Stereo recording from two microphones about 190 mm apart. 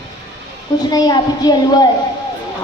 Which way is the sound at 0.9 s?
20° left (ahead or behind).